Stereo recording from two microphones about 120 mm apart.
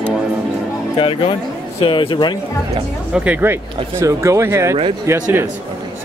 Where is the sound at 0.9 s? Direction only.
45° left (ahead or behind).